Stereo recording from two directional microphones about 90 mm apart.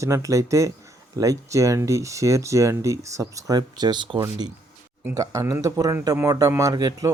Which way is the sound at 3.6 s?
55° right (ahead or behind).